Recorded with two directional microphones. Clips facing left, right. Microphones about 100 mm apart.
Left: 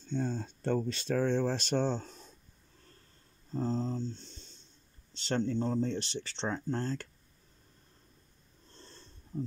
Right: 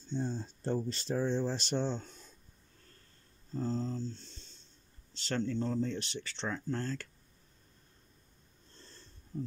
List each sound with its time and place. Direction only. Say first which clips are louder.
0.1 s speech: left 2 dB; 55° left (ahead or behind); by 2.3 s 30° left (ahead or behind)
3.5 s speech: left 2 dB; 30° left (ahead or behind)
9.3 s speech: left 2 dB; 30° left (ahead or behind)